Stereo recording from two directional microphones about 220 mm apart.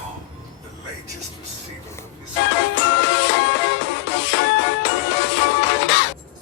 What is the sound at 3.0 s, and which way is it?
Music, 55° left (ahead or behind).